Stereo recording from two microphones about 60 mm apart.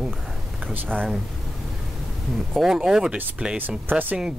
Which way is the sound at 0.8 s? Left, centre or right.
Centre.